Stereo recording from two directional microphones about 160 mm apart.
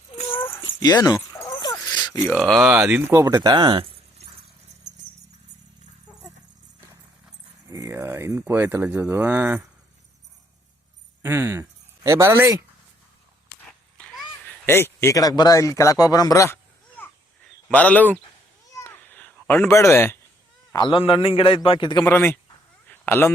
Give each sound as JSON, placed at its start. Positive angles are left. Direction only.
{"t": 0.3, "sound": "a sound", "side_deg": 10}
{"t": 0.6, "sound": "dog", "side_deg": 25}
{"t": 1.7, "sound": "a sound", "side_deg": 25}
{"t": 2.4, "sound": "speech", "side_deg": 0}
{"t": 3.1, "sound": "speech", "side_deg": -20}
{"t": 7.7, "sound": "speech", "side_deg": -20}
{"t": 11.2, "sound": "speech", "side_deg": -15}
{"t": 13.7, "sound": "a sound", "side_deg": 0}
{"t": 14.4, "sound": "speech", "side_deg": 15}
{"t": 18.6, "sound": "cat", "side_deg": 20}
{"t": 20.7, "sound": "a man's voice", "side_deg": 30}
{"t": 22.0, "sound": "speech", "side_deg": 15}
{"t": 22.9, "sound": "a sound", "side_deg": 15}